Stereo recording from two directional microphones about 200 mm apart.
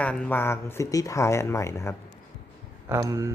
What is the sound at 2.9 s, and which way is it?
Speech, 15° right (ahead or behind).